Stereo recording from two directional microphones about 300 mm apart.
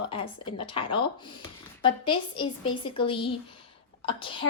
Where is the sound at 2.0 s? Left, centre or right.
Centre.